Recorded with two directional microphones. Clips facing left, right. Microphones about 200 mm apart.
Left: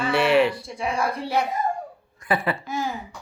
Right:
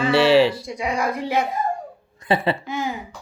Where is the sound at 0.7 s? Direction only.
15° right (ahead or behind).